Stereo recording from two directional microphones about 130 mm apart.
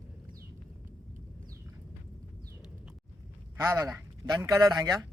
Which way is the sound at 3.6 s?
20° right (ahead or behind).